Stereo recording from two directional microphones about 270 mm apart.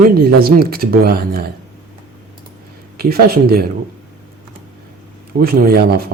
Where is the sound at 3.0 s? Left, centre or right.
Right.